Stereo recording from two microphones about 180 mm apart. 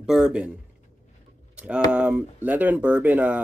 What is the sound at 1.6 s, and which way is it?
Speech, 5° right (ahead or behind).